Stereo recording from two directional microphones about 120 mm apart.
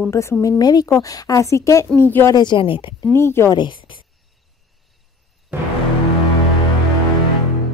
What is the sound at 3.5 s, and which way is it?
Speech, 40° left (ahead or behind).